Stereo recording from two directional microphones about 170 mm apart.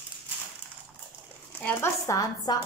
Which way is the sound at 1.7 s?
20° left (ahead or behind).